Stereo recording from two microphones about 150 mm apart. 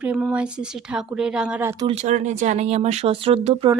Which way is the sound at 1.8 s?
45° right (ahead or behind).